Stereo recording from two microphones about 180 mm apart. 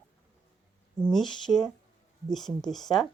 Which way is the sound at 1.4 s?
Centre (ahead or behind).